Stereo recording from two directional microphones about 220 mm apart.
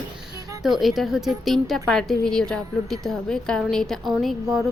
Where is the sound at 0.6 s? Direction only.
Centre (ahead or behind).